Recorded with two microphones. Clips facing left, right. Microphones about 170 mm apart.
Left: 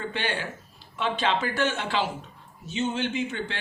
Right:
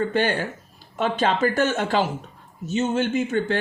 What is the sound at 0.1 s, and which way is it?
Speech, 45° right (ahead or behind).